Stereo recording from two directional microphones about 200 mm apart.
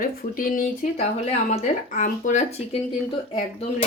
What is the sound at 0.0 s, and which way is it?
Speech, 45° left (ahead or behind).